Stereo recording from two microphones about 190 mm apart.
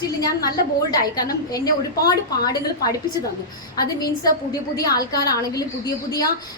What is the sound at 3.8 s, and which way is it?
A woman's voice, 20° left (ahead or behind).